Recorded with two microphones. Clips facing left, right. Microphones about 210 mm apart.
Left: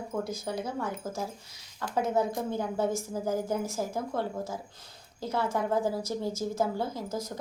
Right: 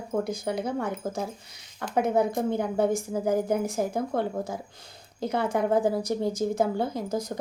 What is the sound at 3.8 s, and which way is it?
Speech, 60° right (ahead or behind).